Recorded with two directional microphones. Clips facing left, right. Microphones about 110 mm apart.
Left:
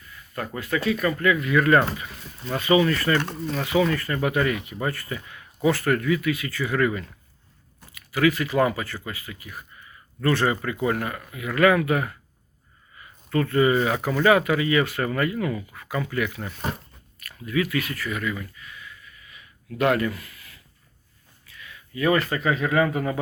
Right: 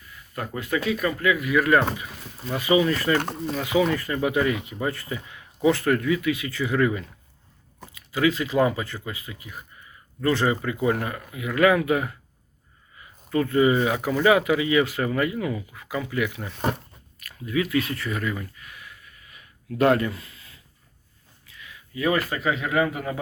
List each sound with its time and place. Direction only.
0.3 s speech: 15° right (ahead or behind)
13.3 s speech: 15° right (ahead or behind); by 18.4 s 35° right (ahead or behind)
19.2 s a sound: 45° right (ahead or behind); by 20.6 s 25° right (ahead or behind)
21.4 s speech: 20° right (ahead or behind)